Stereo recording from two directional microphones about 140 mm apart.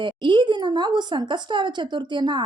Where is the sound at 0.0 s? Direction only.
35° right (ahead or behind).